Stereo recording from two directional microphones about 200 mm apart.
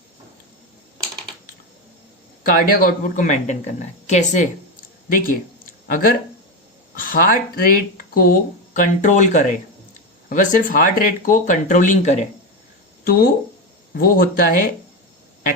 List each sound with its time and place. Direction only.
2.4 s speech: 45° left (ahead or behind)
14.0 s speech: 45° left (ahead or behind)